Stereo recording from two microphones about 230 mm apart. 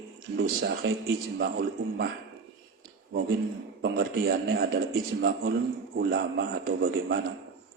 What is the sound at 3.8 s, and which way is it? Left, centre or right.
Speech, right.